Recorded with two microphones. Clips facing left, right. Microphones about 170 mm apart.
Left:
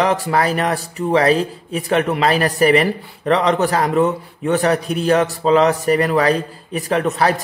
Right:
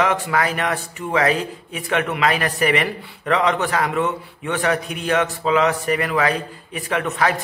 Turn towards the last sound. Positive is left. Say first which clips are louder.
# left 4 dB
turn(degrees=35)  # may be behind; listen again after turning